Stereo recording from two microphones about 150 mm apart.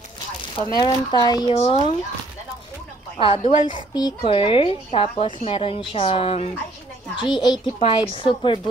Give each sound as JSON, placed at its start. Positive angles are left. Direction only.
{"t": 0.6, "sound": "speech", "side_deg": 25}
{"t": 1.5, "sound": "speech", "side_deg": 40}
{"t": 3.2, "sound": "a woman's voice", "side_deg": 35}
{"t": 7.2, "sound": "a woman's voice", "side_deg": 30}